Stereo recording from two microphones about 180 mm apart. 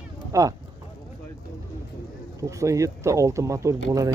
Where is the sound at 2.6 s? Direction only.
15° right (ahead or behind).